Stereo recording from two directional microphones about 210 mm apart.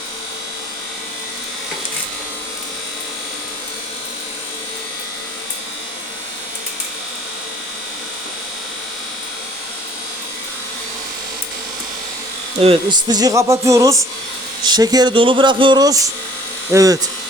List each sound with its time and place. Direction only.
12.5 s a man's voice: 25° right (ahead or behind)